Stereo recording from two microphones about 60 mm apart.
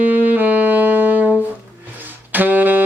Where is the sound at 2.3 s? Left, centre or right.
Right.